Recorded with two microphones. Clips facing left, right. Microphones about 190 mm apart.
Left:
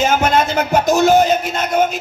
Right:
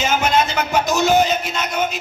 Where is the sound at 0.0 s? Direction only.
55° left (ahead or behind).